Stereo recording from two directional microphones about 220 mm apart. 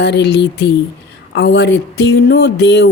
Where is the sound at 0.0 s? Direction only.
50° left (ahead or behind).